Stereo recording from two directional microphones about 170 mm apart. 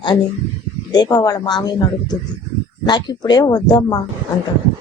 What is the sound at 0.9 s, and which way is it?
Speech, 25° left (ahead or behind).